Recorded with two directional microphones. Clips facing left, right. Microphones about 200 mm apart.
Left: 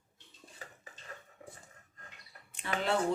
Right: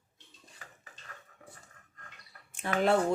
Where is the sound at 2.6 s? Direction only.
45° right (ahead or behind).